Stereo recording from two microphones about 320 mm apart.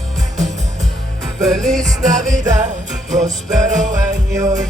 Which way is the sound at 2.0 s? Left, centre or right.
Right.